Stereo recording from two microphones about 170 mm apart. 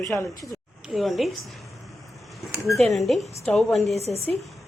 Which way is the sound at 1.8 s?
Centre (ahead or behind).